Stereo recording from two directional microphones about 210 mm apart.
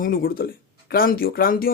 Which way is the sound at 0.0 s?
45° left (ahead or behind).